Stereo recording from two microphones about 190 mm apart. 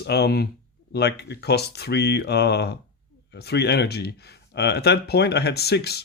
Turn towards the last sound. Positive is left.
turn(degrees=60)  # may be behind; listen again after turning